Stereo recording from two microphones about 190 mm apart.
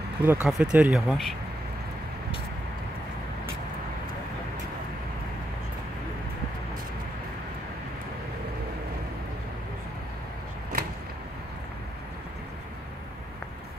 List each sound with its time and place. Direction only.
0.2 s speech: 10° right (ahead or behind)